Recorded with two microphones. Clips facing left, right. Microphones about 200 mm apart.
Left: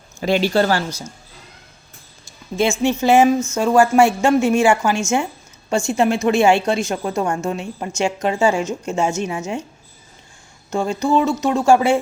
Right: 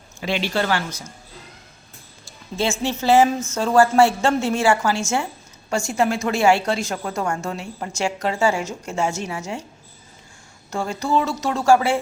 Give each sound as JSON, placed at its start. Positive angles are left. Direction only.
{"t": 0.2, "sound": "speech", "side_deg": 40}
{"t": 2.6, "sound": "a woman's voice", "side_deg": 15}
{"t": 10.7, "sound": "speech", "side_deg": 20}